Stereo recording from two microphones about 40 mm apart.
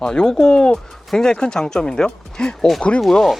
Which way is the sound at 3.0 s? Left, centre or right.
Centre.